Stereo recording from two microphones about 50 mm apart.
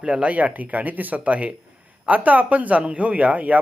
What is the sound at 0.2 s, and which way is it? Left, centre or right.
Speech, right.